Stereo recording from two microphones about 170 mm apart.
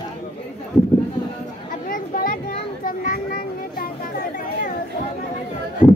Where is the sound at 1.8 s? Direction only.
55° left (ahead or behind).